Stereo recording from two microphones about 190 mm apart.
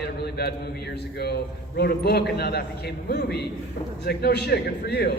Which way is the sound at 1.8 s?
55° left (ahead or behind).